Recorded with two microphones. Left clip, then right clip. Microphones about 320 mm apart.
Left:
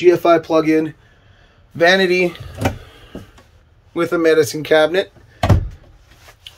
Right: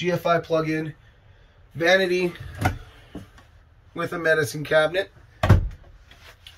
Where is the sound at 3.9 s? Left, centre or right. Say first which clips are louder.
Left 8 dB; centre.